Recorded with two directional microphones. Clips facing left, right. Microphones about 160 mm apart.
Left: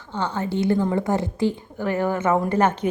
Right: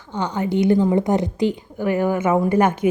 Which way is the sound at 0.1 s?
15° right (ahead or behind).